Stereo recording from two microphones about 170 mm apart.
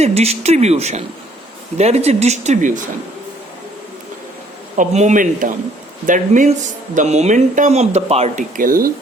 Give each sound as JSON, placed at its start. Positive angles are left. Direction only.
{"t": 0.0, "sound": "speech", "side_deg": -40}
{"t": 4.8, "sound": "speech", "side_deg": -45}